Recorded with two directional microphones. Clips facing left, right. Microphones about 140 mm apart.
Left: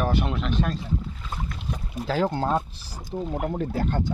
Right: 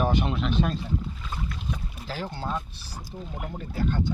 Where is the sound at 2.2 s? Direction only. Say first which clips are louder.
Left 8 dB; 90° left.